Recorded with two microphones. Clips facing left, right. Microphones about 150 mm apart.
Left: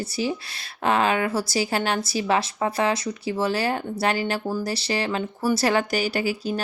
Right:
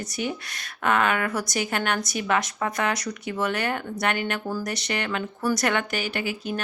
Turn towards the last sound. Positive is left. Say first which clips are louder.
# left 4 dB
turn(degrees=35)  # may be behind; listen again after turning